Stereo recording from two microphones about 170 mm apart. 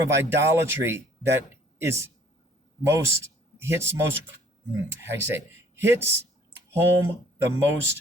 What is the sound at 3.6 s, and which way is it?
Speech, 15° right (ahead or behind).